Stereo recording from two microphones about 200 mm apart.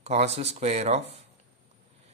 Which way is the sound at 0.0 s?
35° right (ahead or behind).